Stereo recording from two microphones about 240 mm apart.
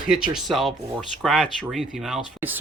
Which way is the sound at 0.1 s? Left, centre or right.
Centre.